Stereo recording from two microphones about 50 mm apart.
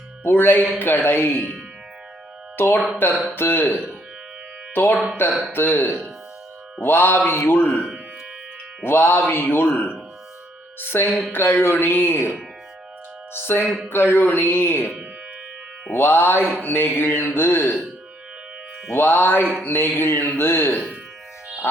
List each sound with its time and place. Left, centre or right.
0.3 s speech: left
2.6 s speech: left
8.8 s speech: left
13.3 s speech: left
16.0 s speech: left
18.9 s speech: left